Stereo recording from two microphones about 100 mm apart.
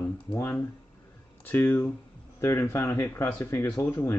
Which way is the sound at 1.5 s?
20° left (ahead or behind).